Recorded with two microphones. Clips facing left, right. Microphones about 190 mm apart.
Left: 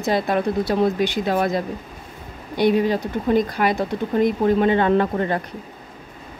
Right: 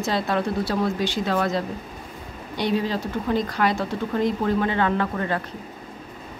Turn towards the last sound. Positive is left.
turn(degrees=25)  # may be behind; listen again after turning